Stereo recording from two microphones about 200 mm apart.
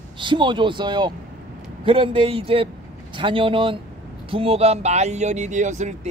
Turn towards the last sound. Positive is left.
turn(degrees=-35)  # may be behind; listen again after turning